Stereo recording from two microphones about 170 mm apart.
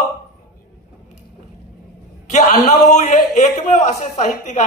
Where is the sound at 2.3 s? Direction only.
45° left (ahead or behind).